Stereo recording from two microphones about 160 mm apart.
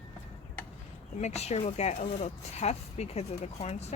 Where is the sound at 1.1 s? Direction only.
45° left (ahead or behind).